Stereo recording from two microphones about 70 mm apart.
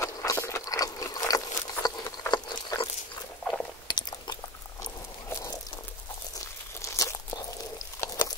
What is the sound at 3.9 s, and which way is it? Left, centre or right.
Chewing, left.